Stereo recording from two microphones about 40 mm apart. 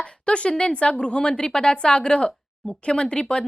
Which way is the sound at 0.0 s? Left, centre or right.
Left.